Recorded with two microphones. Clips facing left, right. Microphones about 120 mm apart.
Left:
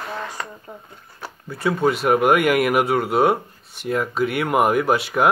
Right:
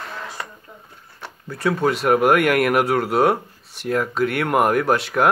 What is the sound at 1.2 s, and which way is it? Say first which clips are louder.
Speech: right 1 dB; centre (ahead or behind).